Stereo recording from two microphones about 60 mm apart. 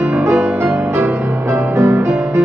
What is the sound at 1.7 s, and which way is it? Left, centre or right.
Music, right.